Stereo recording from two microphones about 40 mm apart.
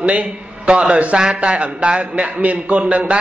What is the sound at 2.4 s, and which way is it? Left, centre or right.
Speech, right.